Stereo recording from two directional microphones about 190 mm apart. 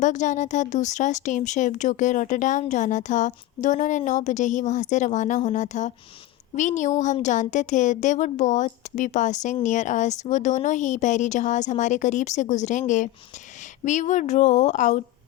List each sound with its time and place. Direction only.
0.0 s speech: 40° left (ahead or behind)